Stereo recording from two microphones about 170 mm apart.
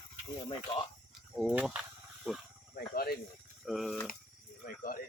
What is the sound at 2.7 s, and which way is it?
Snake, 65° left (ahead or behind).